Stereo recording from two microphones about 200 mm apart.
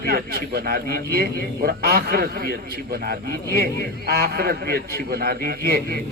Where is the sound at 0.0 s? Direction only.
50° right (ahead or behind).